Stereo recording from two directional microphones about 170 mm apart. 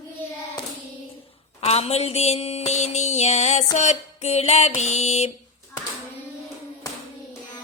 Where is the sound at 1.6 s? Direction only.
35° left (ahead or behind).